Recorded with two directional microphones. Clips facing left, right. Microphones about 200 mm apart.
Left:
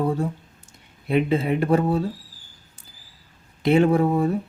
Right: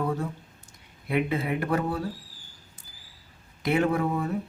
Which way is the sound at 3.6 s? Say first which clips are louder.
Left 7 dB; 30° left (ahead or behind).